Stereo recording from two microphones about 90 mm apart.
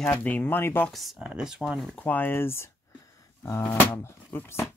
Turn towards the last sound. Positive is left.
turn(degrees=30)  # may be behind; listen again after turning